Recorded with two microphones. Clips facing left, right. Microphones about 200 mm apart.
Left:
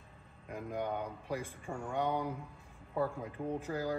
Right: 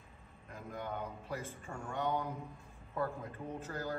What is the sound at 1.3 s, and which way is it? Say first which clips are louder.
Speech: left 6 dB; 10° left (ahead or behind).